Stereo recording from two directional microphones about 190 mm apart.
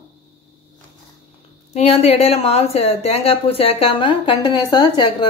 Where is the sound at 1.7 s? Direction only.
35° left (ahead or behind).